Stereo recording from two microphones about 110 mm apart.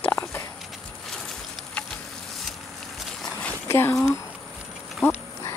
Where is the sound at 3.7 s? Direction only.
25° left (ahead or behind).